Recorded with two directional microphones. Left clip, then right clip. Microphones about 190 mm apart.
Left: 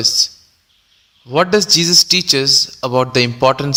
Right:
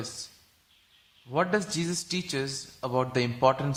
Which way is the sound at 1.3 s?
35° left (ahead or behind).